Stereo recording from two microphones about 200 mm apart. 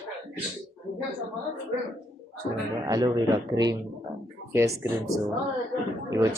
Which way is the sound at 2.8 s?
20° right (ahead or behind).